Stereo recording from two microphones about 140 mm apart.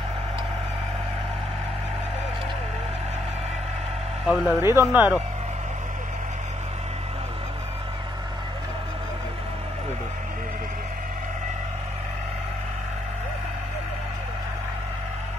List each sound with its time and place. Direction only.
4.3 s speech: centre (ahead or behind)
4.6 s speech: 20° right (ahead or behind)